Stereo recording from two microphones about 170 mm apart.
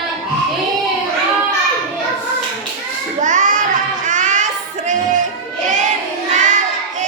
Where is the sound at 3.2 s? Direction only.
50° right (ahead or behind).